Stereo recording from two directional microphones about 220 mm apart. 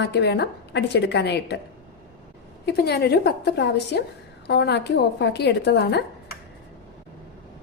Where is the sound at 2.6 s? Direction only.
45° left (ahead or behind).